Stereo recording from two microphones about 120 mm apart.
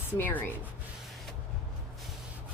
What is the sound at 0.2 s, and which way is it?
Speech, 15° left (ahead or behind).